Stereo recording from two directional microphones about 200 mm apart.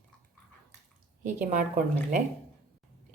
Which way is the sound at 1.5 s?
40° right (ahead or behind).